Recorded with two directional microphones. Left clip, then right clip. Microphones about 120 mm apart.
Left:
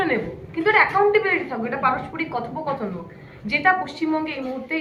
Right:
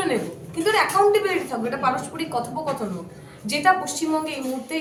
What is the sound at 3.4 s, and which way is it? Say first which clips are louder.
A woman's voice: even; 40° right (ahead or behind).